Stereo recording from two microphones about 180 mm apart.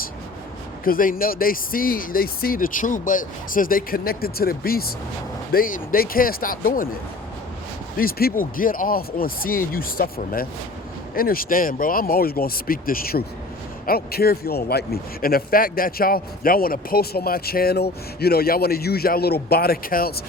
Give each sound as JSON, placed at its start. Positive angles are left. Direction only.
{"t": 0.9, "sound": "speech", "side_deg": 50}
{"t": 7.9, "sound": "a man's voice", "side_deg": 55}